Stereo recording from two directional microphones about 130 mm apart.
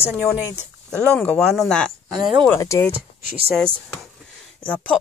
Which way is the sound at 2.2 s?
35° right (ahead or behind).